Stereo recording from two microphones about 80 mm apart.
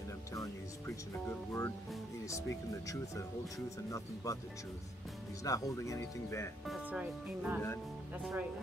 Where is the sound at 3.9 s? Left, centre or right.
Left.